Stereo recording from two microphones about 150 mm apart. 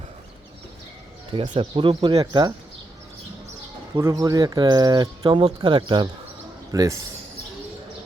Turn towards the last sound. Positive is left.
turn(degrees=-20)  # may be behind; listen again after turning